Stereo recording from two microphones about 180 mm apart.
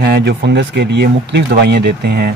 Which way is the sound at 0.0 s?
65° right (ahead or behind).